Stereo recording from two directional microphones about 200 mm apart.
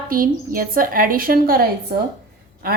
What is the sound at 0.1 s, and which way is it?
A woman's voice, 45° right (ahead or behind).